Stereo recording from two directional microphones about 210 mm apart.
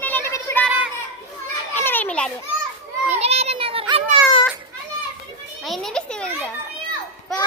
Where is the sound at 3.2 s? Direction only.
30° right (ahead or behind).